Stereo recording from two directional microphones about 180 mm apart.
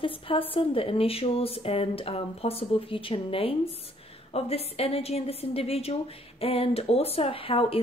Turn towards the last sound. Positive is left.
turn(degrees=30)  # may be behind; listen again after turning